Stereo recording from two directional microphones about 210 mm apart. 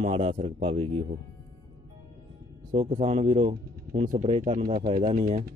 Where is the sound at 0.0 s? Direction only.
30° right (ahead or behind).